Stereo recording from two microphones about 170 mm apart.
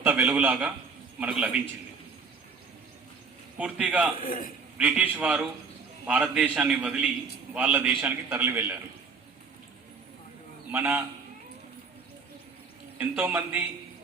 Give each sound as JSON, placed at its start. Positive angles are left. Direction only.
{"t": 0.0, "sound": "a man's voice", "side_deg": -10}
{"t": 3.6, "sound": "a man's voice", "side_deg": -10}
{"t": 4.2, "sound": "a man's voice", "side_deg": 55}
{"t": 4.8, "sound": "a man's voice", "side_deg": -10}
{"t": 10.7, "sound": "a man's voice", "side_deg": -10}
{"t": 13.0, "sound": "a man's voice", "side_deg": -10}